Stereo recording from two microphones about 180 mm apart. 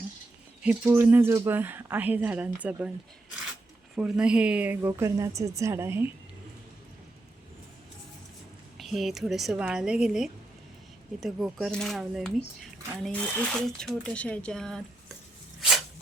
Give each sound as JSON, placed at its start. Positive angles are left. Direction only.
{"t": 0.6, "sound": "speech", "side_deg": -10}
{"t": 3.9, "sound": "speech", "side_deg": -5}
{"t": 8.8, "sound": "speech", "side_deg": 0}